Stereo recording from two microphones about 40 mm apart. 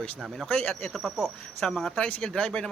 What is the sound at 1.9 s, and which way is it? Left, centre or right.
Speech, left.